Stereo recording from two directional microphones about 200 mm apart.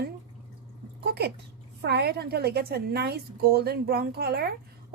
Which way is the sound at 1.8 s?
55° right (ahead or behind).